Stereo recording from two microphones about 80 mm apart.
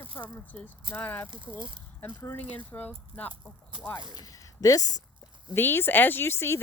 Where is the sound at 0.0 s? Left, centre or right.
Left.